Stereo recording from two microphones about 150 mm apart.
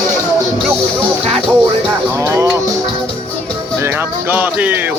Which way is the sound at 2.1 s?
20° right (ahead or behind).